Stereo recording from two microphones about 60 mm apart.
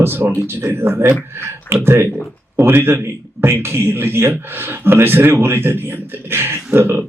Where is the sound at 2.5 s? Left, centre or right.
Right.